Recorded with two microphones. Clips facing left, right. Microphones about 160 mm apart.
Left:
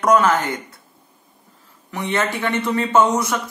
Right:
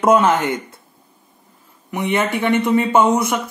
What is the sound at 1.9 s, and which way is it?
Speech, 20° right (ahead or behind).